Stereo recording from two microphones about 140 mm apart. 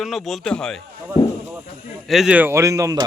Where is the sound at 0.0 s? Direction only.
Centre (ahead or behind).